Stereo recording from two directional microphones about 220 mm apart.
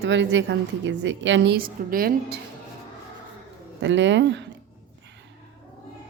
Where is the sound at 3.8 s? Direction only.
55° right (ahead or behind).